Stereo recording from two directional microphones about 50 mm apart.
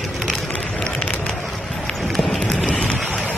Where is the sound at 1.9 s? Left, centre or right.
Centre.